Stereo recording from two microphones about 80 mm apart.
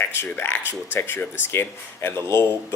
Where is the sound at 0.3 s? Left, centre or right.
Left.